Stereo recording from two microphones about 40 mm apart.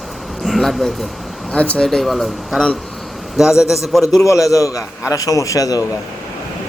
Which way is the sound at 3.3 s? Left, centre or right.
Centre.